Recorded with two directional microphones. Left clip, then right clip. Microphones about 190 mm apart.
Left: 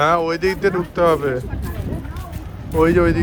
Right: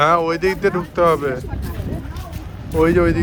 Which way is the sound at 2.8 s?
15° left (ahead or behind).